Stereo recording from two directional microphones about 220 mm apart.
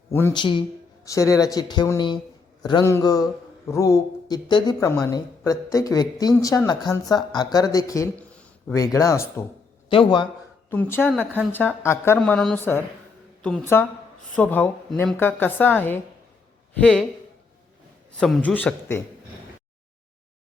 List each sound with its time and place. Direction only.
0.1 s a man's voice: 10° left (ahead or behind)
10.7 s speech: 10° left (ahead or behind)
12.2 s a woman's voice: centre (ahead or behind)
18.2 s speech: 5° left (ahead or behind)